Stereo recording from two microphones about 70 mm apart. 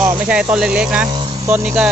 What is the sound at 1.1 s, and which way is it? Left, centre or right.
Vehicle, right.